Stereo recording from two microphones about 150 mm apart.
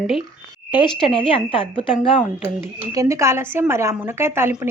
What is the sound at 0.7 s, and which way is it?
Speech, 35° left (ahead or behind).